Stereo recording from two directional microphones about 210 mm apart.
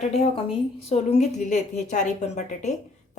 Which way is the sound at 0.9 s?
30° left (ahead or behind).